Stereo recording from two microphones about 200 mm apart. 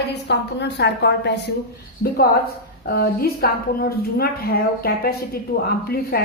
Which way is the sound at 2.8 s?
50° left (ahead or behind).